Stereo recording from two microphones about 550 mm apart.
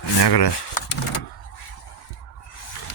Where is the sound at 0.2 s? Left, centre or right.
Left.